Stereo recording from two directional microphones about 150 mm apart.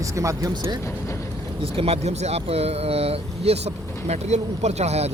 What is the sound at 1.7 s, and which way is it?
Speech, 40° right (ahead or behind).